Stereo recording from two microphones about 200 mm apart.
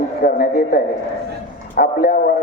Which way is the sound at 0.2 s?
45° left (ahead or behind).